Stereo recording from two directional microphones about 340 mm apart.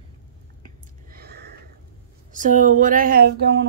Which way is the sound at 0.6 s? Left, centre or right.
Right.